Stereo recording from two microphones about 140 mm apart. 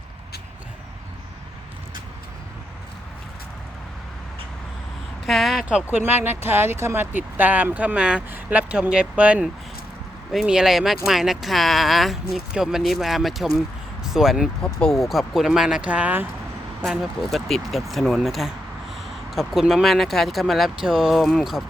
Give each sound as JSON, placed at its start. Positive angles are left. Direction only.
{"t": 5.2, "sound": "speech", "side_deg": 0}